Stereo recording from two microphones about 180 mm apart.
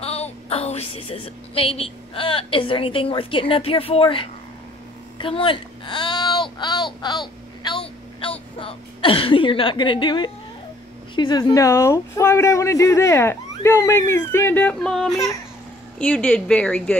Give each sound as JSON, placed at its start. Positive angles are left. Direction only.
{"t": 0.0, "sound": "a woman's voice", "side_deg": 35}
{"t": 5.2, "sound": "a sound", "side_deg": 30}
{"t": 11.1, "sound": "speech", "side_deg": 25}